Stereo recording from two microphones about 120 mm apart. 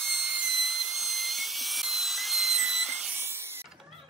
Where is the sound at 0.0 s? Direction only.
10° right (ahead or behind).